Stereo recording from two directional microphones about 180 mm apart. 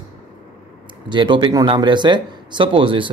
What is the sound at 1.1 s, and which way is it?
Speech, 25° right (ahead or behind).